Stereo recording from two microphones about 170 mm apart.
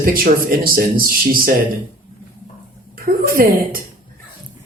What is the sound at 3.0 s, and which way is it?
Speech, 55° right (ahead or behind).